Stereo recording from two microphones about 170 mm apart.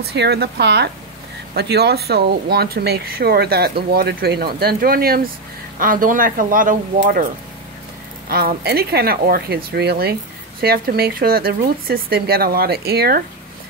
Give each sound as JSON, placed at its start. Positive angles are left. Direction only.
{"t": 0.0, "sound": "speech", "side_deg": -80}
{"t": 8.3, "sound": "speech", "side_deg": -65}